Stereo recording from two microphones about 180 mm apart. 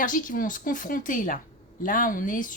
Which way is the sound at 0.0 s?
45° left (ahead or behind).